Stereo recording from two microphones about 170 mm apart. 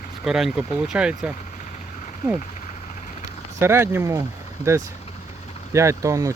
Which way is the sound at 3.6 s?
15° right (ahead or behind).